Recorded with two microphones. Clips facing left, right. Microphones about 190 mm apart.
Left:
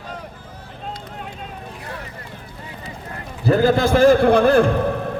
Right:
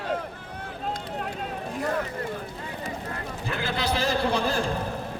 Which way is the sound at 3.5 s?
40° left (ahead or behind).